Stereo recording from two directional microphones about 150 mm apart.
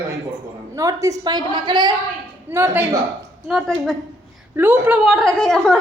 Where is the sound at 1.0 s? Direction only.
25° right (ahead or behind).